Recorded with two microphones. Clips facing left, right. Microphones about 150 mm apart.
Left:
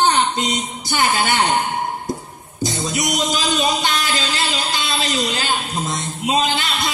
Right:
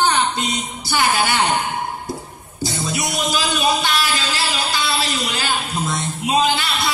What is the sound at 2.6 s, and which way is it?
A man's voice, 20° left (ahead or behind).